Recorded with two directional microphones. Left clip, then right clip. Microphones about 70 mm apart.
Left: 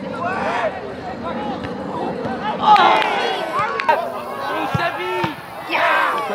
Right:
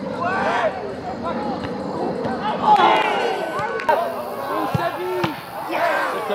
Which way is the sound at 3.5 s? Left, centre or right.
Left.